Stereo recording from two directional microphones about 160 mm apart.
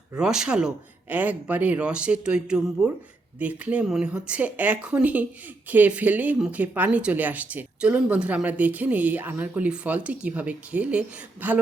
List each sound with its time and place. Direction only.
0.2 s speech: 5° right (ahead or behind)